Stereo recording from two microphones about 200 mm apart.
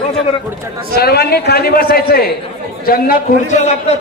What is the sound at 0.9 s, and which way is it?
A man's voice, 50° left (ahead or behind).